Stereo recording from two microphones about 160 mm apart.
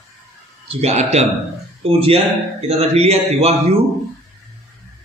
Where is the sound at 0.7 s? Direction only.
40° right (ahead or behind).